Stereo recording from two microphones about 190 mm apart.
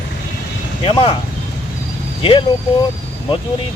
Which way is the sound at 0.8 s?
30° left (ahead or behind).